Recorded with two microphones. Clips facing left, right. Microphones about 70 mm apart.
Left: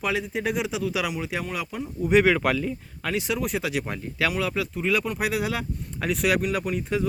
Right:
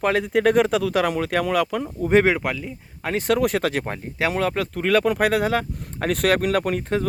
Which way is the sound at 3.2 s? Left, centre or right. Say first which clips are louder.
Right 9 dB; right.